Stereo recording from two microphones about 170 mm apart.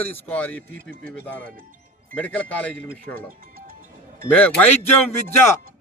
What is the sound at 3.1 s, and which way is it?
Music, 55° right (ahead or behind).